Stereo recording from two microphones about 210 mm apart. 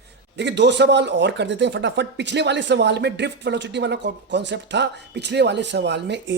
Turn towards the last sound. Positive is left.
turn(degrees=-55)  # may be behind; listen again after turning